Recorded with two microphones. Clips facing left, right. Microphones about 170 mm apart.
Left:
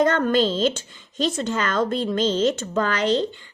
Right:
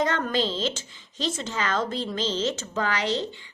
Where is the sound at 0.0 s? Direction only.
50° left (ahead or behind).